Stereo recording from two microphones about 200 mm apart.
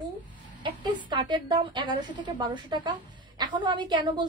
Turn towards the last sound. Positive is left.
turn(degrees=-20)  # may be behind; listen again after turning